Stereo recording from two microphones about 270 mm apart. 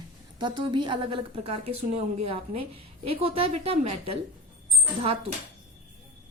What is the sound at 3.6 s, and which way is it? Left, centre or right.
Speech, right.